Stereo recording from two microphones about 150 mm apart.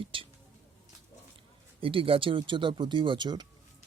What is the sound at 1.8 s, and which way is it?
Speech, 35° right (ahead or behind).